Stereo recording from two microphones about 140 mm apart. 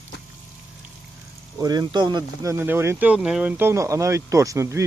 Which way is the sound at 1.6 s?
30° right (ahead or behind).